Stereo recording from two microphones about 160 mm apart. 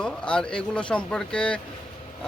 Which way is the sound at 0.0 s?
5° left (ahead or behind).